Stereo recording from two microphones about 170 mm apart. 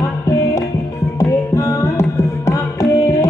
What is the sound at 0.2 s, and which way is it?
Music, 20° left (ahead or behind).